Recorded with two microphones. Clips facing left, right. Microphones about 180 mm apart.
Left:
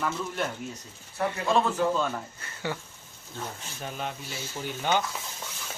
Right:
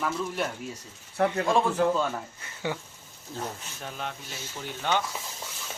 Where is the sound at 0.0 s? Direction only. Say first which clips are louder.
Right 1 dB; 5° right (ahead or behind).